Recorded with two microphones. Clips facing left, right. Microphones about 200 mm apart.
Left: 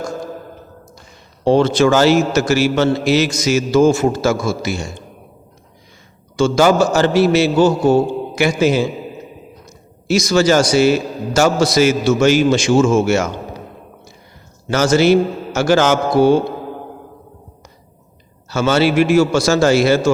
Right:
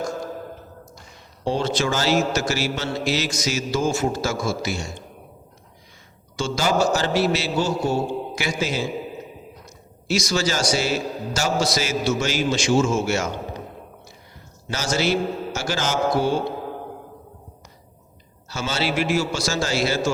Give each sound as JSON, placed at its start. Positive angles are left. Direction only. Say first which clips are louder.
{"t": 1.5, "sound": "a man's voice", "louder": "left 10 dB", "side_deg": 60}
{"t": 6.3, "sound": "a man's voice", "louder": "left 9 dB", "side_deg": 55}
{"t": 10.1, "sound": "a man's voice", "louder": "left 10 dB", "side_deg": 55}
{"t": 14.7, "sound": "a man's voice", "louder": "left 10 dB", "side_deg": 60}
{"t": 18.4, "sound": "a man's voice", "louder": "left 11 dB", "side_deg": 60}